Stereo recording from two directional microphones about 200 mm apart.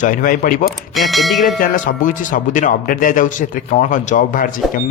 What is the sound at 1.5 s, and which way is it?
A man's voice, 40° left (ahead or behind).